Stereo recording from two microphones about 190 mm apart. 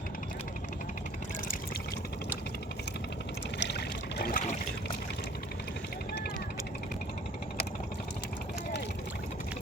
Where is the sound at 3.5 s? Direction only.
60° left (ahead or behind).